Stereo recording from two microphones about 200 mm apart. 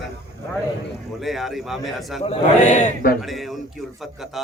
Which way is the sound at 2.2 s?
35° left (ahead or behind).